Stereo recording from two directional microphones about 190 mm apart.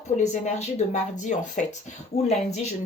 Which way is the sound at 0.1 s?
30° left (ahead or behind).